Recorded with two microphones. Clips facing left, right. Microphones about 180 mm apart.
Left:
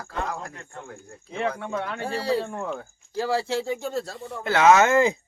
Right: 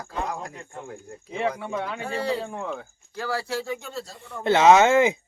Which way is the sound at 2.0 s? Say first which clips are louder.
Left 3 dB; 35° left (ahead or behind).